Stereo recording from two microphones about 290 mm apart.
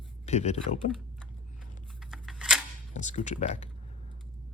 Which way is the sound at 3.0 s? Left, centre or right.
Left.